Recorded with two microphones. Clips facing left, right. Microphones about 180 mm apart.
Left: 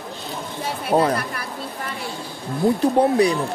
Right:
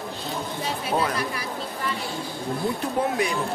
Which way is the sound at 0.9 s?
40° left (ahead or behind).